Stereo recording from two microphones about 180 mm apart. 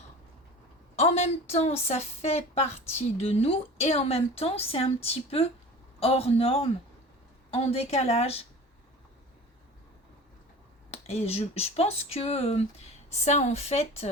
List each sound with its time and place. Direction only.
0.9 s a woman's voice: 35° left (ahead or behind)
10.9 s a woman's voice: 35° left (ahead or behind)